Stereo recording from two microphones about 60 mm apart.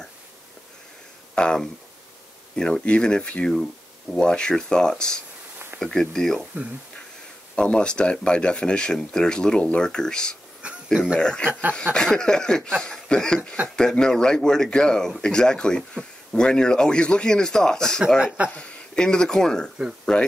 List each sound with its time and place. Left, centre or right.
1.3 s speech: centre
7.5 s speech: centre
10.6 s a sound: centre
11.1 s speech: centre